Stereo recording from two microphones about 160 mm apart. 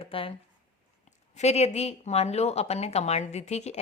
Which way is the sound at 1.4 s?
45° left (ahead or behind).